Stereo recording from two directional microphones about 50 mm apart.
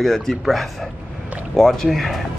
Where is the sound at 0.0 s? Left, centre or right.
Centre.